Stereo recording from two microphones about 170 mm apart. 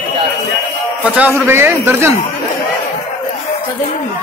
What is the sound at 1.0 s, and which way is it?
A man's voice, 10° right (ahead or behind).